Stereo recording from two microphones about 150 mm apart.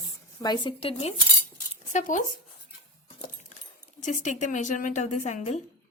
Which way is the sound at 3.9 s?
55° left (ahead or behind).